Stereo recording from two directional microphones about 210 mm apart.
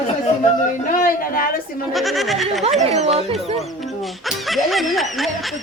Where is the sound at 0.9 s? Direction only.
40° left (ahead or behind).